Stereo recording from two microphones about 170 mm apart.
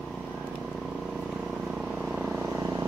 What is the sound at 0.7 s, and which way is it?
Vehicle, centre (ahead or behind).